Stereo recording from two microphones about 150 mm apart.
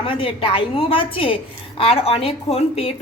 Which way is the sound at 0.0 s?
35° left (ahead or behind).